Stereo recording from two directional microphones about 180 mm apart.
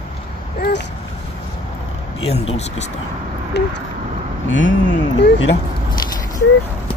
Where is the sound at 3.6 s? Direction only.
70° left (ahead or behind).